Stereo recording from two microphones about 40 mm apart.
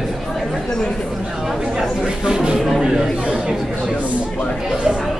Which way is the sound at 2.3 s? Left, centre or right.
Centre.